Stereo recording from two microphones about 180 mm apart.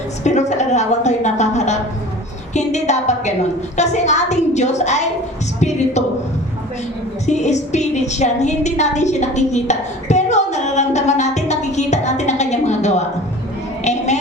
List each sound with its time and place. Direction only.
0.3 s a woman's voice: 40° left (ahead or behind)
7.3 s music: 40° left (ahead or behind)
13.8 s a sound: 40° left (ahead or behind)